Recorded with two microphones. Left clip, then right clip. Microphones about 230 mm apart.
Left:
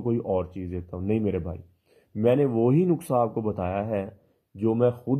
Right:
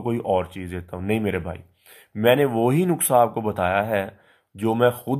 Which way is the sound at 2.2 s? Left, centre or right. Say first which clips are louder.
Right 4 dB; centre.